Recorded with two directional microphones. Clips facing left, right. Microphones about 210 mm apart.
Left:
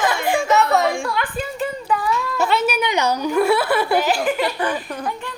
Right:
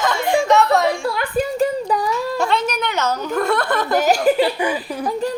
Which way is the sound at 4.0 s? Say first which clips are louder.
Right 4 dB; 40° right (ahead or behind).